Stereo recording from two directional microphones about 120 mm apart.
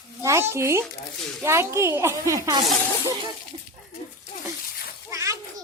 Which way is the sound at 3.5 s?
60° right (ahead or behind).